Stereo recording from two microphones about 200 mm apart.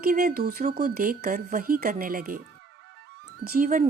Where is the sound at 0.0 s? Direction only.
45° right (ahead or behind).